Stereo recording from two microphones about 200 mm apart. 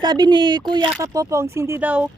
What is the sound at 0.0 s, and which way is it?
Speech, 20° right (ahead or behind).